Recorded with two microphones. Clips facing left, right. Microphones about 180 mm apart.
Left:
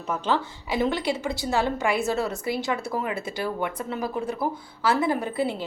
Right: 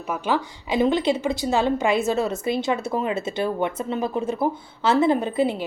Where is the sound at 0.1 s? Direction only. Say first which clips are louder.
Right 1 dB; 10° right (ahead or behind).